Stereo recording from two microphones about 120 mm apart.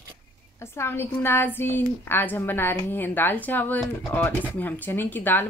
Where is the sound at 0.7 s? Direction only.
20° left (ahead or behind).